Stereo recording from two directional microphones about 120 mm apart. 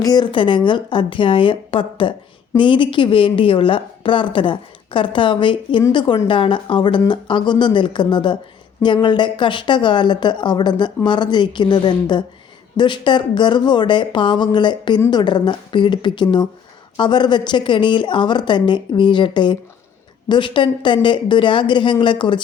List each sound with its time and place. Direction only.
0.0 s a woman's voice: 35° left (ahead or behind)